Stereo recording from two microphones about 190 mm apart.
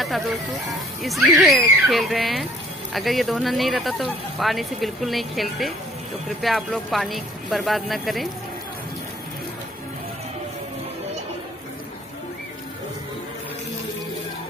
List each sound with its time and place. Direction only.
0.0 s speech: centre (ahead or behind)